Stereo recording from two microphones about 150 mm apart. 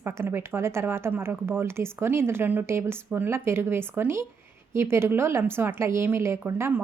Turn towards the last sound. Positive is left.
turn(degrees=-15)  # may be behind; listen again after turning